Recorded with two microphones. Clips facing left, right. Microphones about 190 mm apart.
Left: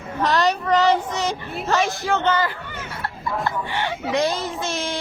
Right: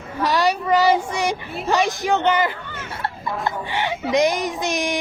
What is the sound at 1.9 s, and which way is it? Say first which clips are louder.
Speech: right 2 dB; 15° right (ahead or behind).